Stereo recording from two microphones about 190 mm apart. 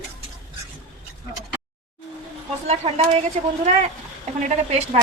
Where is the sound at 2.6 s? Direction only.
30° right (ahead or behind).